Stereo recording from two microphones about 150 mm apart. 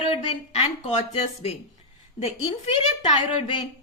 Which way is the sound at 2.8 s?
40° left (ahead or behind).